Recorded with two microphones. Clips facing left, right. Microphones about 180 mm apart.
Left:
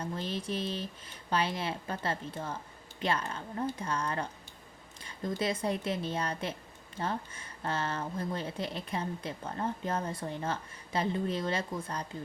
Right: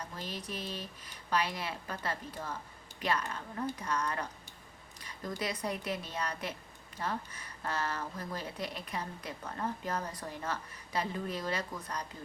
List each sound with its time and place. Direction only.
0.0 s speech: 30° left (ahead or behind)